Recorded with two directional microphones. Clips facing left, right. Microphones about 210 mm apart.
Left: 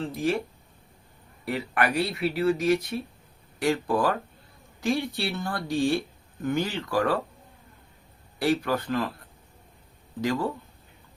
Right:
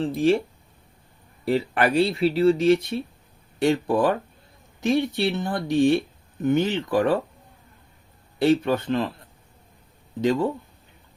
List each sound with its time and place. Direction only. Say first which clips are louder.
0.0 s speech: right 7 dB; 30° right (ahead or behind)
1.5 s speech: right 5 dB; 30° right (ahead or behind)
8.4 s speech: right 5 dB; 25° right (ahead or behind)
10.2 s speech: right 5 dB; 20° right (ahead or behind)